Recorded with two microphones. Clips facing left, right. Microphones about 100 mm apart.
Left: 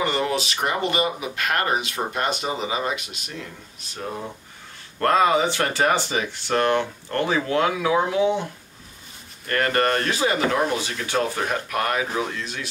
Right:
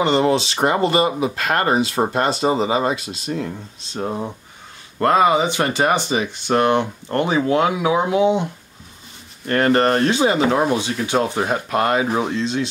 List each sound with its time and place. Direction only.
0.0 s speech: 25° right (ahead or behind)
4.9 s speech: 15° right (ahead or behind)
9.5 s speech: 25° right (ahead or behind)